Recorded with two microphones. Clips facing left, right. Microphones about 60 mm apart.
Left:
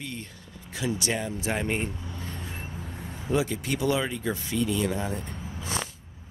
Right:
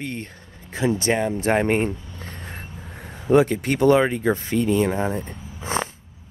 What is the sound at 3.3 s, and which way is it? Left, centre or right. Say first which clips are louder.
Speech: right 10 dB; right.